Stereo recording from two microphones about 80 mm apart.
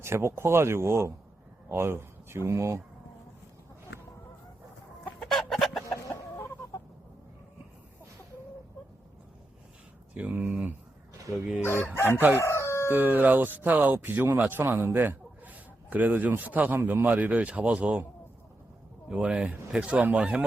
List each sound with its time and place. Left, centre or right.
0.0 s speech: right
5.3 s chicken: centre
10.2 s speech: centre
11.6 s speech: left
12.4 s crowing: left
12.9 s speech: right
19.0 s speech: centre